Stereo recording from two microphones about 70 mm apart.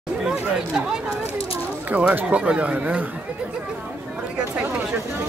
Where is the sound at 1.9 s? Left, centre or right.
Right.